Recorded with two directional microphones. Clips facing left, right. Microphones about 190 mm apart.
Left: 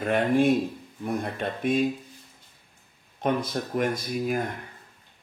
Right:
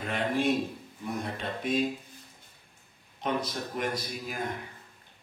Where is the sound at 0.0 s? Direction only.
50° left (ahead or behind).